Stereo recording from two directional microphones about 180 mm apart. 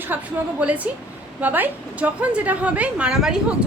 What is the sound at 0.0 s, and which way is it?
A woman's voice, 10° right (ahead or behind).